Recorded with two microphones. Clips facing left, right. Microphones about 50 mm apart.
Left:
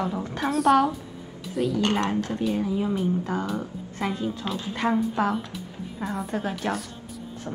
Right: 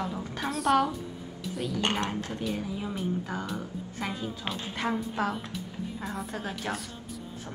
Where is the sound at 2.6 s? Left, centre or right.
Centre.